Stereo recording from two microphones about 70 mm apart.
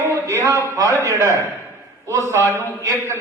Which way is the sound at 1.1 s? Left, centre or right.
Right.